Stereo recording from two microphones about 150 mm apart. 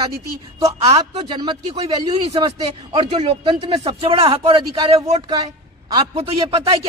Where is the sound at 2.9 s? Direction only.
40° right (ahead or behind).